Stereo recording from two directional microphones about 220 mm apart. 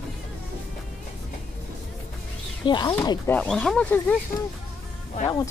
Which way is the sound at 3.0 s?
10° left (ahead or behind).